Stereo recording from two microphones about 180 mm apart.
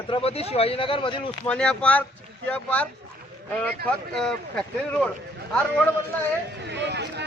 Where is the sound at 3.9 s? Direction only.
5° left (ahead or behind).